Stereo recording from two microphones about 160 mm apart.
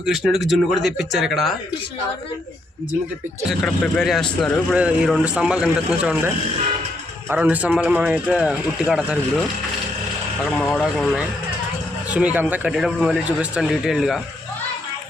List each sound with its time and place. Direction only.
0.0 s a man's voice: centre (ahead or behind)
3.5 s a man's voice: centre (ahead or behind)
10.5 s a man's voice: 5° left (ahead or behind)